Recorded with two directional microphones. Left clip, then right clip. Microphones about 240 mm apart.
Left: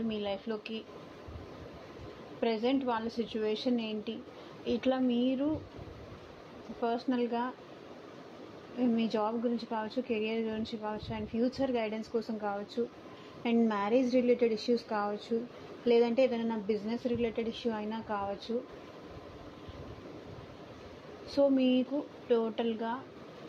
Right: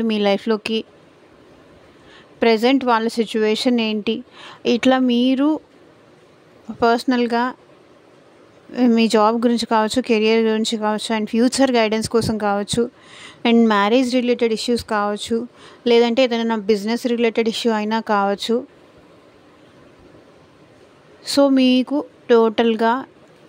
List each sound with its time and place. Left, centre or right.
0.1 s speech: right
2.4 s speech: right
6.8 s speech: right
8.7 s a woman's voice: right
21.3 s speech: right